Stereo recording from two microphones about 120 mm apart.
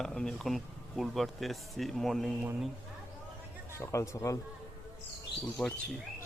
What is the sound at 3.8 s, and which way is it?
Speech, 25° left (ahead or behind).